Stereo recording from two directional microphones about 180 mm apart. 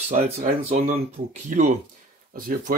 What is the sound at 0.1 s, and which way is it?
Speech, 45° right (ahead or behind).